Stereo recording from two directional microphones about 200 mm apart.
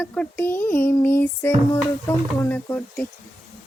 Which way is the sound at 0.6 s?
45° left (ahead or behind).